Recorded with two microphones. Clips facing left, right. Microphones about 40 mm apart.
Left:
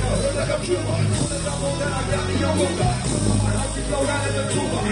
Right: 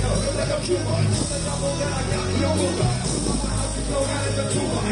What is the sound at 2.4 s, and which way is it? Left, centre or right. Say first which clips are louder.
Music: left 1 dB; left.